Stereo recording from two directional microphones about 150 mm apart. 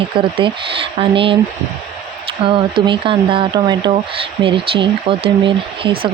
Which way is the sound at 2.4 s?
35° right (ahead or behind).